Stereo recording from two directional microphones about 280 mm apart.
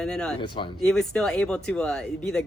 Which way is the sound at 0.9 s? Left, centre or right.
Centre.